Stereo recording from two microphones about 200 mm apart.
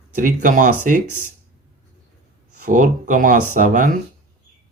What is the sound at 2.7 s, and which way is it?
Speech, 40° right (ahead or behind).